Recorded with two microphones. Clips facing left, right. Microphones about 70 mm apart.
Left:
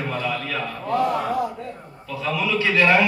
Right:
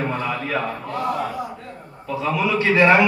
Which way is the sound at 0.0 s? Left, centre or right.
Right.